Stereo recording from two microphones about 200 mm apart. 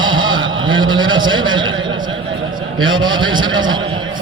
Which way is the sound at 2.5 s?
25° right (ahead or behind).